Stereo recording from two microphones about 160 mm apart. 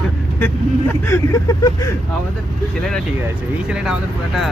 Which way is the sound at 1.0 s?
20° left (ahead or behind).